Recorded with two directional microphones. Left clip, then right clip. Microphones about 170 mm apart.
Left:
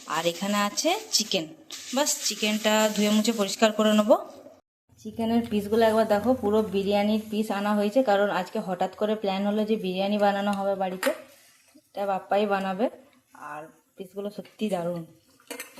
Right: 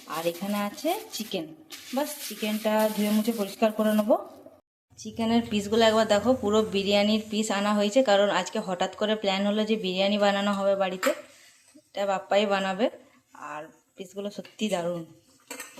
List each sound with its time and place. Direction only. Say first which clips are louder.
0.1 s speech: left 3 dB; centre (ahead or behind)